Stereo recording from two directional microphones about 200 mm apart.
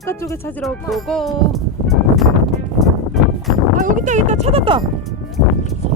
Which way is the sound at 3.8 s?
40° right (ahead or behind).